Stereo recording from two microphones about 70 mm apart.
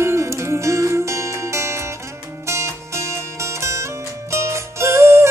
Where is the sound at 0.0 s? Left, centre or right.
Right.